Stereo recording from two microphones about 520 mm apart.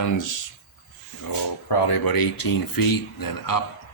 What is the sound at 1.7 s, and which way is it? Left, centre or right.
A man's voice, left.